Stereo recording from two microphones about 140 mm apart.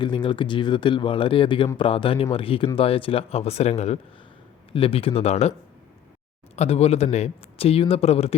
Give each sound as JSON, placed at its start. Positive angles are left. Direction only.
{"t": 0.0, "sound": "speech", "side_deg": 35}
{"t": 6.6, "sound": "speech", "side_deg": 50}